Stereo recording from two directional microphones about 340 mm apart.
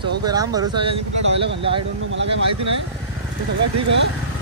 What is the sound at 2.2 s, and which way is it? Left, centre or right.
Speech, right.